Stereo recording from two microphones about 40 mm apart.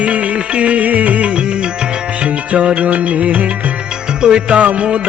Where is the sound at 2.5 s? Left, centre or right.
Right.